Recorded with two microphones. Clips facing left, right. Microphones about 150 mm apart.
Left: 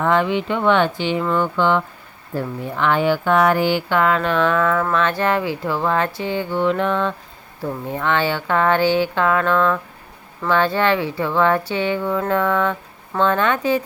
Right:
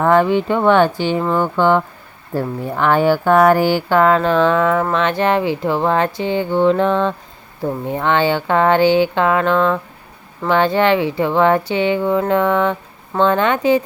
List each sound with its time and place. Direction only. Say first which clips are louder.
0.0 s speech: right 5 dB; 45° right (ahead or behind); by 13.8 s 25° right (ahead or behind)